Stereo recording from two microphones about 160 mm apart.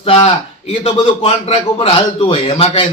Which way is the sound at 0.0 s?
35° left (ahead or behind).